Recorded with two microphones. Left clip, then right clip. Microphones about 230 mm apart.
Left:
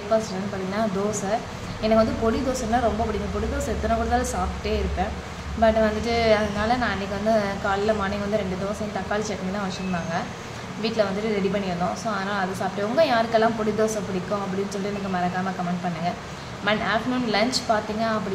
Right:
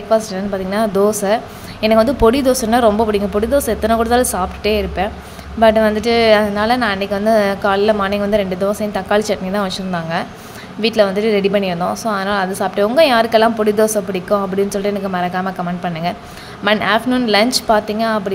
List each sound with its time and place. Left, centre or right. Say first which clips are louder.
0.1 s a woman's voice: right 8 dB; right
16.6 s a woman's voice: right 9 dB; right